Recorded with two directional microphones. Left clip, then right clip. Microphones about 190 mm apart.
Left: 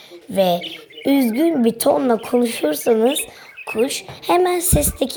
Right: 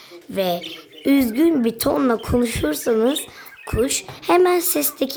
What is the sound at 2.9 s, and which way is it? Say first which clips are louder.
Speech: left 2 dB; 15° right (ahead or behind).